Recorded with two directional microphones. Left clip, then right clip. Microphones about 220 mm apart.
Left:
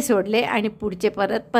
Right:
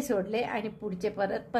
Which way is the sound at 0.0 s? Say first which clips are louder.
Left 9 dB; 35° left (ahead or behind).